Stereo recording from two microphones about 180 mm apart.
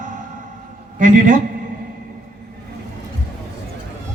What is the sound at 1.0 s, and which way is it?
Speech, 45° right (ahead or behind).